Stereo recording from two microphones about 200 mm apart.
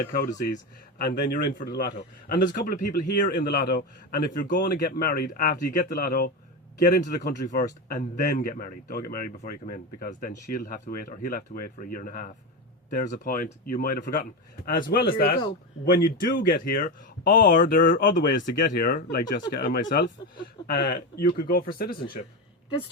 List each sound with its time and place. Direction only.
0.0 s speech: 45° left (ahead or behind)